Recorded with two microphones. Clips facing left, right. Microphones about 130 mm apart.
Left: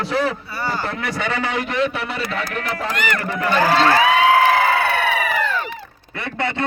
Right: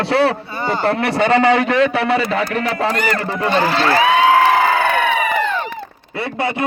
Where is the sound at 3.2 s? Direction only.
25° right (ahead or behind).